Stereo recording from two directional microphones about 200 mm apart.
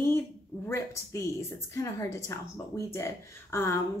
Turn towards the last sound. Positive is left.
turn(degrees=15)  # may be behind; listen again after turning